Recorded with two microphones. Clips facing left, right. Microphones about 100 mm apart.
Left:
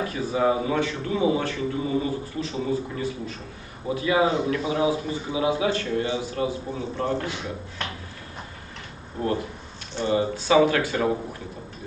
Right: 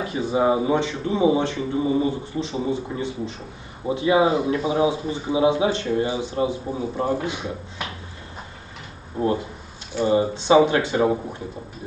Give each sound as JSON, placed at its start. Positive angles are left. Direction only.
{"t": 0.0, "sound": "speech", "side_deg": -20}
{"t": 7.8, "sound": "a sound", "side_deg": -10}
{"t": 9.2, "sound": "speech", "side_deg": -20}